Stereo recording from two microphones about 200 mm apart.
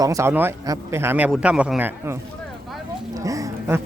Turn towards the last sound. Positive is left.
turn(degrees=-15)  # may be behind; listen again after turning